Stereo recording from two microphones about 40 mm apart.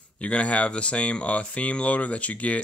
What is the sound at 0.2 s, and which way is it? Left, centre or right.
Speech, left.